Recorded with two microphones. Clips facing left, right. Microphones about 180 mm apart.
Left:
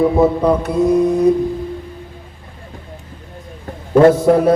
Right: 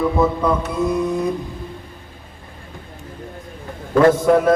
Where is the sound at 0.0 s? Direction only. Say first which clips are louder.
Left 5 dB; 30° left (ahead or behind).